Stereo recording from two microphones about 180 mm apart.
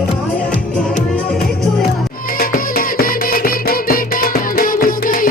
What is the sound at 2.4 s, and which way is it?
Music, 55° left (ahead or behind).